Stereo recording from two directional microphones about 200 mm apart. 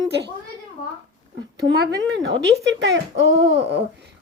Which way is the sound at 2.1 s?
65° right (ahead or behind).